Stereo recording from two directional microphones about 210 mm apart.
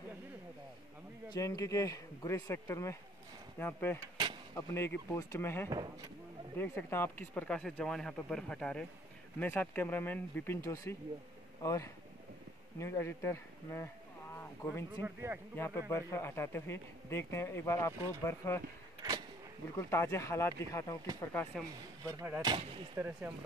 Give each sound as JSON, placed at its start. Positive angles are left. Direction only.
{"t": 1.3, "sound": "speech", "side_deg": 15}
{"t": 5.7, "sound": "speech", "side_deg": -20}
{"t": 6.6, "sound": "speech", "side_deg": 10}
{"t": 14.3, "sound": "a sound", "side_deg": 10}
{"t": 15.0, "sound": "speech", "side_deg": -10}
{"t": 15.5, "sound": "speech", "side_deg": 10}
{"t": 19.8, "sound": "speech", "side_deg": 10}
{"t": 22.0, "sound": "speech", "side_deg": -15}